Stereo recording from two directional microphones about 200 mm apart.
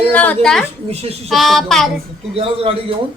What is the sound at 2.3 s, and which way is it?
Speech, 30° right (ahead or behind).